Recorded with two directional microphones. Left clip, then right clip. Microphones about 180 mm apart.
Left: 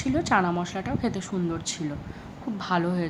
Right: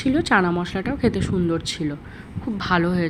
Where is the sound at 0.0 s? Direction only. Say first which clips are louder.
Right 5 dB; 20° right (ahead or behind).